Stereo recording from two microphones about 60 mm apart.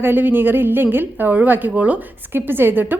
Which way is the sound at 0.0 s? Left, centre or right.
Right.